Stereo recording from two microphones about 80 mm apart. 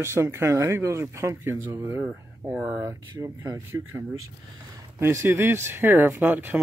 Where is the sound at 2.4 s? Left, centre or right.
Right.